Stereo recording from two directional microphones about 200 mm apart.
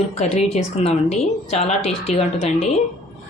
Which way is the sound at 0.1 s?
30° left (ahead or behind).